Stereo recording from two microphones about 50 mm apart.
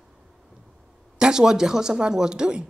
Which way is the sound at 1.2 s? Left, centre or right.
Centre.